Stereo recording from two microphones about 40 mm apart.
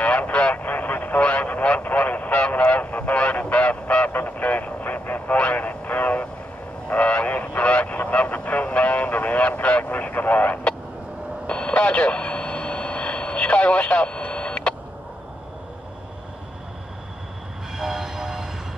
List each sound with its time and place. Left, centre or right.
0.0 s vehicle: left
0.7 s vehicle: left
1.2 s a sound: left
3.2 s honk: left
5.4 s vehicle: left
6.9 s a sound: left
11.4 s radio: left
14.3 s printer: left
17.7 s train: centre